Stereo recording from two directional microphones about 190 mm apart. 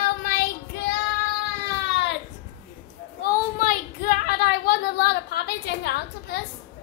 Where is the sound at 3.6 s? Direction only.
50° left (ahead or behind).